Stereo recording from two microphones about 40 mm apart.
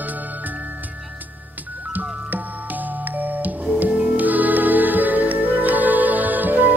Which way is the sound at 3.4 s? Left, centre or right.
Right.